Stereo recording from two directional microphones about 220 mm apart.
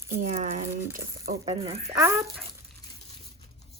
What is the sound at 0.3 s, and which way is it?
A woman's voice, 35° right (ahead or behind).